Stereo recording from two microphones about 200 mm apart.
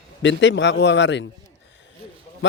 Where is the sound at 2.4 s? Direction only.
65° left (ahead or behind).